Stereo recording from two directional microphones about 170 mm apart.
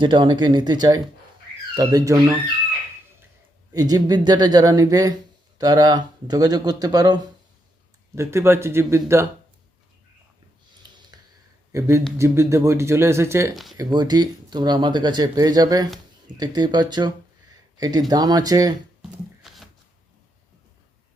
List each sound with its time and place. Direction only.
0.0 s speech: 25° right (ahead or behind)
3.7 s speech: 20° right (ahead or behind)
11.1 s a sound: 25° right (ahead or behind)
11.7 s speech: 20° right (ahead or behind)
19.4 s shuffling cards: centre (ahead or behind)